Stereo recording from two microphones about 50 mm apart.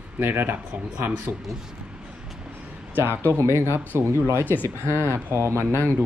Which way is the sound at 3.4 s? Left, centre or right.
Right.